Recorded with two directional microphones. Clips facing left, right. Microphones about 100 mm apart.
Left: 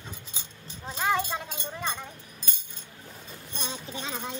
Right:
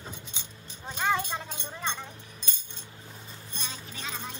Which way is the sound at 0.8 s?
Centre (ahead or behind).